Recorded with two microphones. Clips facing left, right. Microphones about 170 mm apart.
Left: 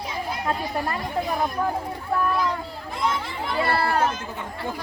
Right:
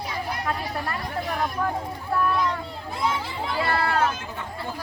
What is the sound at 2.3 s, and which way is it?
Speech, centre (ahead or behind).